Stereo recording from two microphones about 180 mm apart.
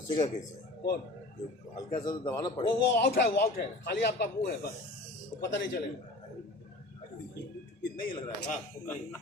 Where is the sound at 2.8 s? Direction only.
65° left (ahead or behind).